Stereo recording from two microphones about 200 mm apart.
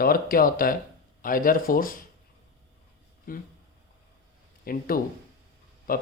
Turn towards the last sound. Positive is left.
turn(degrees=45)  # may be behind; listen again after turning